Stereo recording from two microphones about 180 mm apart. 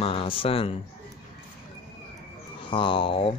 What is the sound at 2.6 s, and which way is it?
Speech, 30° left (ahead or behind).